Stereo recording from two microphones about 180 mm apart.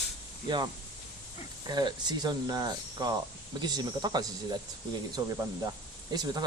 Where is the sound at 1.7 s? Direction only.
25° right (ahead or behind).